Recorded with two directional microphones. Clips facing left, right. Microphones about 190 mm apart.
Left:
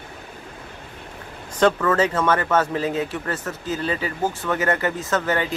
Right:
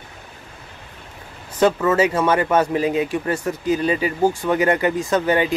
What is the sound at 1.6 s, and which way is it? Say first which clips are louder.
Speech: right 2 dB; 10° right (ahead or behind).